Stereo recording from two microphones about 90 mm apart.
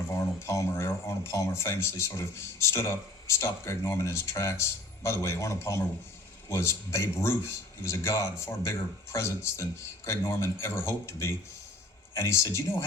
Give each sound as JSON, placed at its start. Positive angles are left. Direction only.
{"t": 0.1, "sound": "speech", "side_deg": 30}